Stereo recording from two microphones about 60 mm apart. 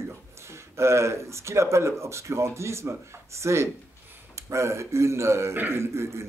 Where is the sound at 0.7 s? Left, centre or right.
Right.